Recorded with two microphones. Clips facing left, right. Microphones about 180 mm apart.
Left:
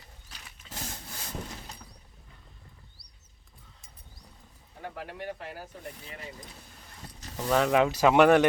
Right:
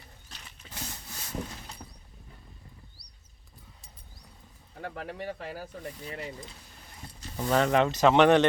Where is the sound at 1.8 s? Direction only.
35° right (ahead or behind).